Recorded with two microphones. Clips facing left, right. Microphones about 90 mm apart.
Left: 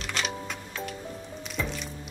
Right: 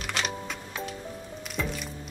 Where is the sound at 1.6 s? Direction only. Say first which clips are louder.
Right 1 dB; 5° right (ahead or behind).